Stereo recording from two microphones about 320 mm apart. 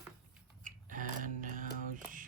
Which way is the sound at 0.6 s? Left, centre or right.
Right.